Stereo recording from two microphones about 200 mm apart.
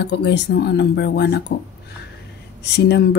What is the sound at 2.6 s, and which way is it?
Speech, 55° left (ahead or behind).